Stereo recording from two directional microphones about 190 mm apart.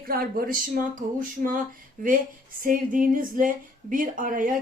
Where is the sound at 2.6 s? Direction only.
45° right (ahead or behind).